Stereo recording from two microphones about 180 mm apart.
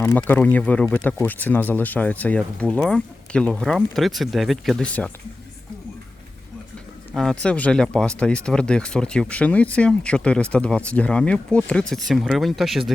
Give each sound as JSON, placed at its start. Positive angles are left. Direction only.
{"t": 0.2, "sound": "speech", "side_deg": 10}
{"t": 7.1, "sound": "speech", "side_deg": 0}